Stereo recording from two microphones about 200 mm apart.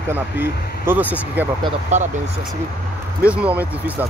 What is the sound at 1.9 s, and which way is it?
Speech, 35° right (ahead or behind).